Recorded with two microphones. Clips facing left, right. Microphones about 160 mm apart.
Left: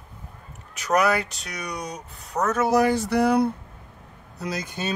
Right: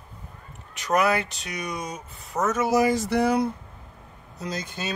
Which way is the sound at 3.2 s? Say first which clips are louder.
Left 3 dB; 60° left (ahead or behind).